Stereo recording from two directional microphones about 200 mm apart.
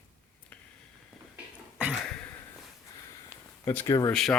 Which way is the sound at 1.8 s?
5° right (ahead or behind).